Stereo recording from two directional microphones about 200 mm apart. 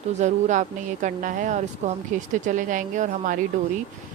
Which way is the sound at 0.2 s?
35° right (ahead or behind).